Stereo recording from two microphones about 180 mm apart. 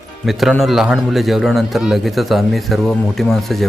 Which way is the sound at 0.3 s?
Centre (ahead or behind).